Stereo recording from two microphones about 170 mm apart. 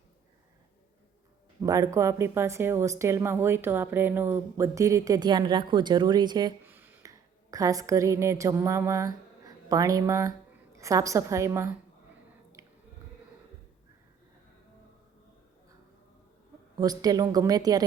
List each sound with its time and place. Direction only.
1.6 s speech: 20° right (ahead or behind)
6.7 s a woman's voice: 10° right (ahead or behind)
12.6 s a sound: 15° right (ahead or behind)
16.7 s speech: 20° right (ahead or behind)